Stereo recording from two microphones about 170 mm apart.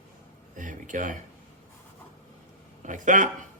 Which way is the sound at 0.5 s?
50° right (ahead or behind).